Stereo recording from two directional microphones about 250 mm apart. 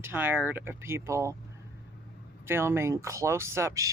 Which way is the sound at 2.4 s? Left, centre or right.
Centre.